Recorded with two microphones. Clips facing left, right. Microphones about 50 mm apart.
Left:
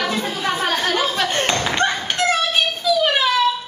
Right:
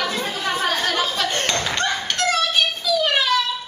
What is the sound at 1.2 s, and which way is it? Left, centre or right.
Clapping, centre.